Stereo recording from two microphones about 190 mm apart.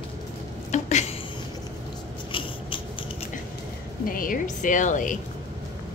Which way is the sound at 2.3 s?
25° left (ahead or behind).